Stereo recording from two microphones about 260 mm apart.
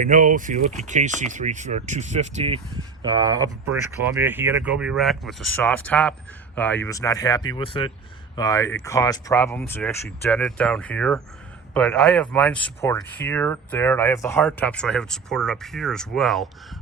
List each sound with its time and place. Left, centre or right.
0.0 s speech: right; by 16.5 s centre